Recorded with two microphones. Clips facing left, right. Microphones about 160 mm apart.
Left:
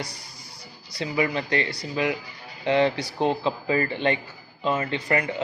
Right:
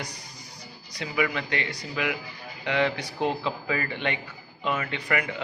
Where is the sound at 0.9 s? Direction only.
30° left (ahead or behind).